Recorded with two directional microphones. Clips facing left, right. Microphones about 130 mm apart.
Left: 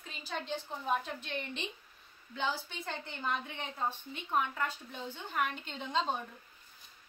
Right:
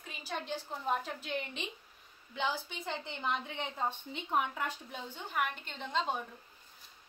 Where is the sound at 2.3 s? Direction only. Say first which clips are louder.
Even; 15° right (ahead or behind).